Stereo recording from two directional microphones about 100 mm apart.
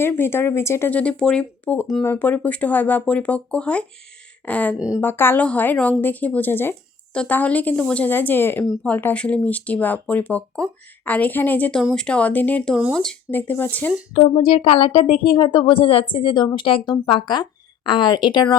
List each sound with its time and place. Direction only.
0.0 s speech: 25° left (ahead or behind)
0.9 s speech: 15° left (ahead or behind)
13.3 s speech: 20° left (ahead or behind)
14.2 s a woman's voice: 85° left; by 18.4 s 45° left (ahead or behind)